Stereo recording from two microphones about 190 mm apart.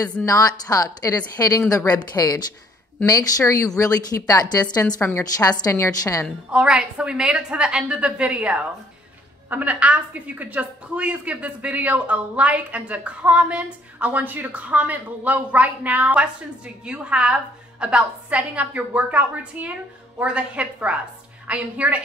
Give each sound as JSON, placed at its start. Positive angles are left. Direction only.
{"t": 0.0, "sound": "a woman's voice", "side_deg": 15}
{"t": 6.2, "sound": "a woman's voice", "side_deg": -5}